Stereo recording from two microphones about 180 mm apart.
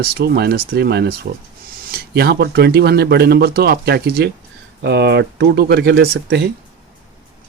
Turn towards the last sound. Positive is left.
turn(degrees=-65)  # may be behind; listen again after turning